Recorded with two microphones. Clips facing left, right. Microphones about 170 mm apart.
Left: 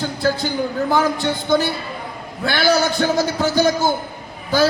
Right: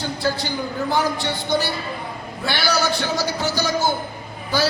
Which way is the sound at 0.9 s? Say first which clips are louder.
Left 2 dB; 50° left (ahead or behind).